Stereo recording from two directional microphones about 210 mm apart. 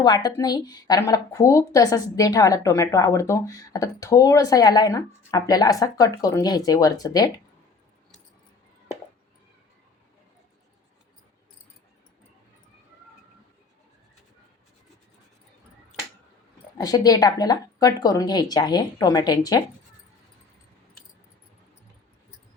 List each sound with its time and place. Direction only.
0.0 s a woman's voice: 20° left (ahead or behind)
16.7 s speech: 20° left (ahead or behind)